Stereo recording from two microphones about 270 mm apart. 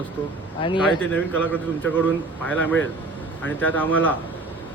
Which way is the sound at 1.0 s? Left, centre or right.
Centre.